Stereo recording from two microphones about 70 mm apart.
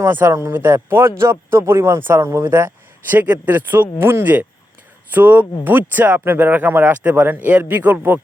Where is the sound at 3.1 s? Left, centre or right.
Right.